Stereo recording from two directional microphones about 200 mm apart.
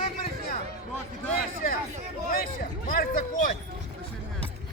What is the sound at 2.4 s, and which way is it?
Speech, 45° left (ahead or behind).